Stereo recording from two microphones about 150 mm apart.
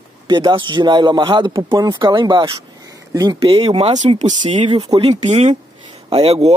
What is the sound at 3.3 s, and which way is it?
Speech, 35° right (ahead or behind).